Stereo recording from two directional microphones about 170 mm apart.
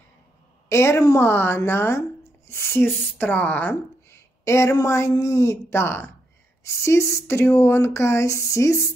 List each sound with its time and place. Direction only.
0.7 s a woman's voice: 15° left (ahead or behind)